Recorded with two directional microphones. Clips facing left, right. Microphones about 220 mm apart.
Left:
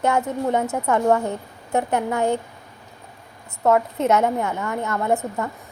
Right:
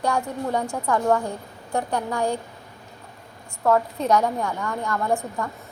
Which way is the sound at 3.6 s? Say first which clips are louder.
Left 2 dB; 20° left (ahead or behind).